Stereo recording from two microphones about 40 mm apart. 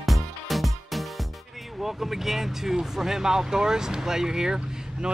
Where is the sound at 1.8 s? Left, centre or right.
Centre.